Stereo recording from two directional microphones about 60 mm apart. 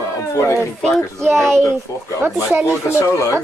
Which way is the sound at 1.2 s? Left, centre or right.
Right.